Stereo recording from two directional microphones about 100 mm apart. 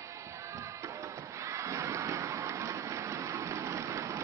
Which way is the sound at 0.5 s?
30° right (ahead or behind).